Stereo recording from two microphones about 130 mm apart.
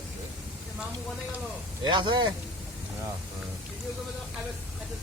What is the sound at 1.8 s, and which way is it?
Speech, 40° right (ahead or behind).